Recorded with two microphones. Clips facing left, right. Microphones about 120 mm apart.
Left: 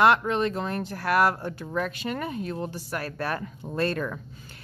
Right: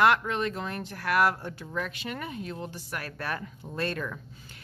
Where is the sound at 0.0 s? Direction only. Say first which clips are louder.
Left 3 dB; 30° left (ahead or behind).